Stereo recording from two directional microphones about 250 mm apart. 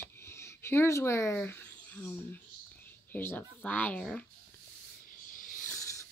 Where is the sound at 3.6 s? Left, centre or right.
Centre.